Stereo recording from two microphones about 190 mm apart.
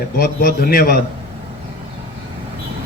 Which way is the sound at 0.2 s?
50° left (ahead or behind).